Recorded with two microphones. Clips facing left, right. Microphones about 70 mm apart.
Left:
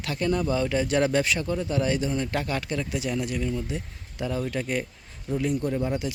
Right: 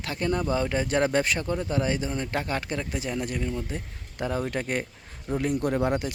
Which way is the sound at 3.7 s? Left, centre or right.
Right.